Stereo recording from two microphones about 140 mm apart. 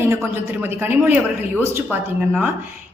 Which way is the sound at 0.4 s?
15° right (ahead or behind).